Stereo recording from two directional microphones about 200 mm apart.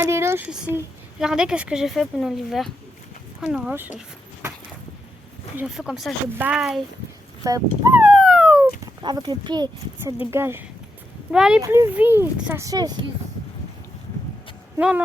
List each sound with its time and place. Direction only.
0.0 s speech: 10° right (ahead or behind)
5.5 s speech: 5° right (ahead or behind)
7.4 s a sound: 15° right (ahead or behind)
9.0 s speech: 20° right (ahead or behind)
10.3 s speech: 10° right (ahead or behind)
11.6 s speech: 15° right (ahead or behind)
14.8 s speech: 5° right (ahead or behind)